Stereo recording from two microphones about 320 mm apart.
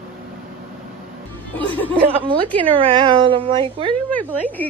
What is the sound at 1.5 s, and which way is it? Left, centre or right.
Music, centre.